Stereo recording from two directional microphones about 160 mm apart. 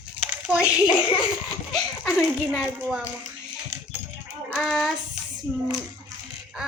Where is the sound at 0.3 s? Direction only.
5° right (ahead or behind).